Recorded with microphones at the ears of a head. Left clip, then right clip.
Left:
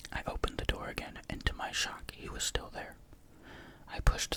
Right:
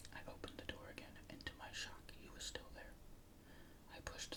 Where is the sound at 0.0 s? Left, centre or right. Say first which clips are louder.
Left 16 dB; left.